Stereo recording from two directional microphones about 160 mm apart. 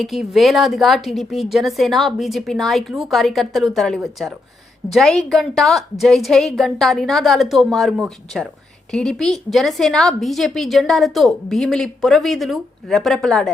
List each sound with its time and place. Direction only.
0.0 s a woman's voice: centre (ahead or behind)